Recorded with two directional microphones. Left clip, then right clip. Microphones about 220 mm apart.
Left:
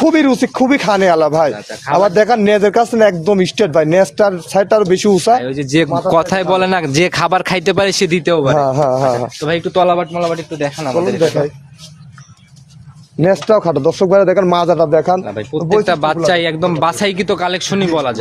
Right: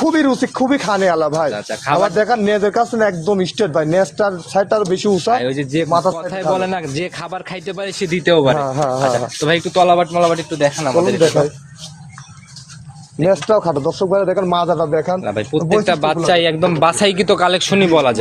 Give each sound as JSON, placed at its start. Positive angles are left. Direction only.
{"t": 0.0, "sound": "a man's voice", "side_deg": 40}
{"t": 9.6, "sound": "speech", "side_deg": 20}
{"t": 10.1, "sound": "speech", "side_deg": 0}
{"t": 13.2, "sound": "a man's voice", "side_deg": 35}
{"t": 15.2, "sound": "speech", "side_deg": -15}
{"t": 15.7, "sound": "speech", "side_deg": 15}